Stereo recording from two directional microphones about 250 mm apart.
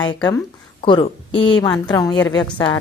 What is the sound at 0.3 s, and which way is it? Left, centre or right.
A woman's voice, centre.